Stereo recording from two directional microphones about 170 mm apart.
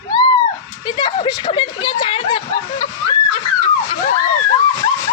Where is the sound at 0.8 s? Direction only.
25° left (ahead or behind).